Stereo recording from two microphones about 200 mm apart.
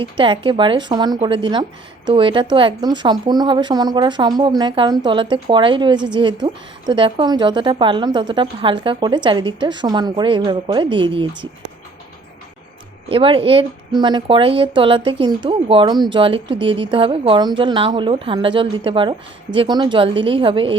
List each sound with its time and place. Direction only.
0.0 s a woman's voice: 25° right (ahead or behind)
13.1 s a woman's voice: 25° right (ahead or behind)